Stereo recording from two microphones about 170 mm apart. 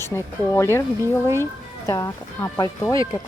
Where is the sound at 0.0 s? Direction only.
15° left (ahead or behind).